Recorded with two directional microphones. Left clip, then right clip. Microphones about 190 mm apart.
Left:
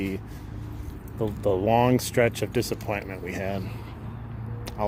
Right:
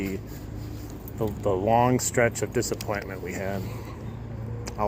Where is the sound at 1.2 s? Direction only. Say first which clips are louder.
Left 1 dB; 30° left (ahead or behind).